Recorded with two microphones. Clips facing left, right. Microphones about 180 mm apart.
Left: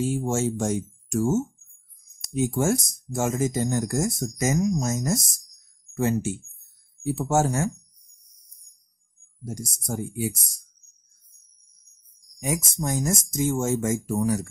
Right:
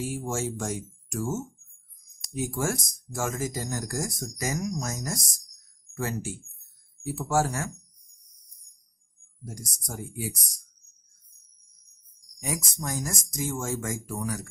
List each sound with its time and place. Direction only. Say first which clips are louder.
0.0 s speech: left 6 dB; 25° left (ahead or behind)
9.4 s speech: left 7 dB; 25° left (ahead or behind)
12.4 s speech: left 5 dB; 20° left (ahead or behind)